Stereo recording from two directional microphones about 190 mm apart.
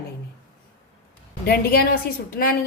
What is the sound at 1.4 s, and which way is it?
Speech, 55° left (ahead or behind).